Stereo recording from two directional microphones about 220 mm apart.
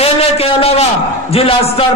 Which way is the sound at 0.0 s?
25° left (ahead or behind).